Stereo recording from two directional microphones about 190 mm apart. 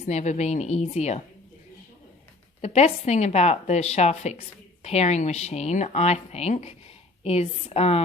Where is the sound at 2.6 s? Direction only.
35° left (ahead or behind).